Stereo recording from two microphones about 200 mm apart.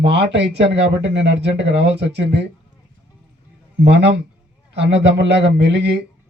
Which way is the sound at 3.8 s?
60° right (ahead or behind).